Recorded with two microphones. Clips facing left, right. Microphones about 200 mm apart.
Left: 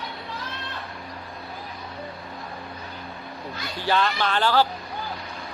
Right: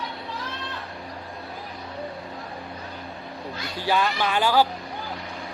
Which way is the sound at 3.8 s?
10° right (ahead or behind).